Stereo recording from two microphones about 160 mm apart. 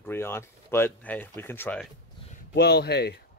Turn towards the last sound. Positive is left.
turn(degrees=90)